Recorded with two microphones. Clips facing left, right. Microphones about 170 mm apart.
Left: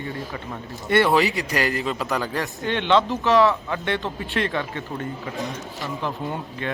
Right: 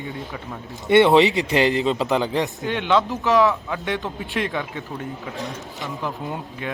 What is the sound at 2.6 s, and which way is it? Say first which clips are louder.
Speech: left 3 dB; 5° right (ahead or behind).